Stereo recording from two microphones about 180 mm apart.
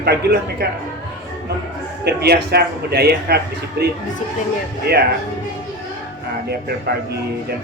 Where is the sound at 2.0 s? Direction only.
65° right (ahead or behind).